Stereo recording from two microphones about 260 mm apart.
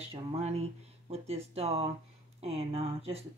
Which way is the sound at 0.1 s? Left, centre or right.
Right.